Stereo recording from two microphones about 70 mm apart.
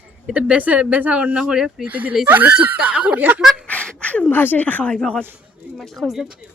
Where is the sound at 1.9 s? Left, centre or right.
Right.